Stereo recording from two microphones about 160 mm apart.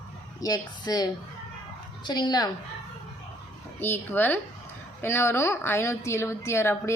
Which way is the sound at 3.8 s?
15° left (ahead or behind).